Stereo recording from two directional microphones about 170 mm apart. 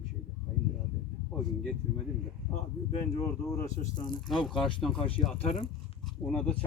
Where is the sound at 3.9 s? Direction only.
25° left (ahead or behind).